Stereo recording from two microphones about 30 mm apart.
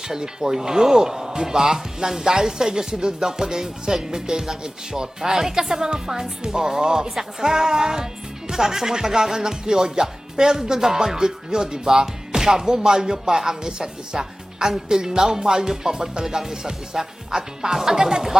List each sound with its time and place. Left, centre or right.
0.1 s speech: right
16.2 s music: centre
16.6 s speech: right